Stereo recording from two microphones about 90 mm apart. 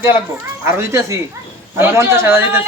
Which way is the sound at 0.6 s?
30° right (ahead or behind).